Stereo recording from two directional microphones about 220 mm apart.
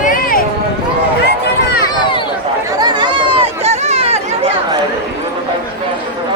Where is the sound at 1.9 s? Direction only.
20° left (ahead or behind).